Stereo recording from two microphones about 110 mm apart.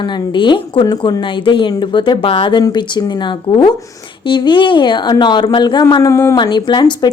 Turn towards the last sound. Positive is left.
turn(degrees=40)  # may be behind; listen again after turning